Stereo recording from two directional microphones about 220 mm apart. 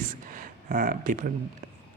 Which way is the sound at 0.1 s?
35° right (ahead or behind).